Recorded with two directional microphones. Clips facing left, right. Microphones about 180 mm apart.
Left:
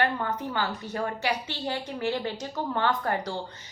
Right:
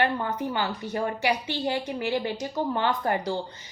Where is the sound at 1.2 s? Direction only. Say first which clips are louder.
Right 4 dB; 15° right (ahead or behind).